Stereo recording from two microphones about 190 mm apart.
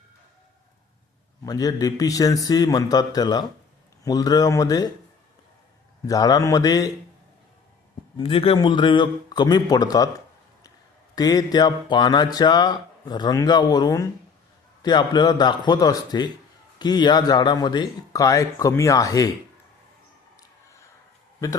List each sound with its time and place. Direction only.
1.5 s speech: 20° left (ahead or behind)
6.1 s speech: 20° left (ahead or behind)
8.2 s speech: 30° left (ahead or behind)
11.1 s speech: 20° left (ahead or behind)